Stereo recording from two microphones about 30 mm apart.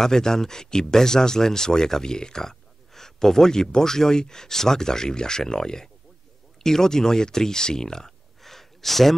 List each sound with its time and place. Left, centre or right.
0.0 s speech: centre
2.4 s speech: centre
8.4 s a sound: centre